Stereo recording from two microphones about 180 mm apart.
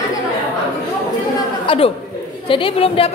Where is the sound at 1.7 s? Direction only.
30° left (ahead or behind).